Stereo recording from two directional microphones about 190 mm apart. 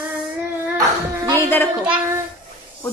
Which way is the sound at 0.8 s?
20° right (ahead or behind).